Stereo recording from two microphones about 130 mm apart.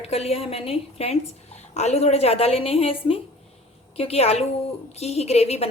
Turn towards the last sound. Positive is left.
turn(degrees=55)  # may be behind; listen again after turning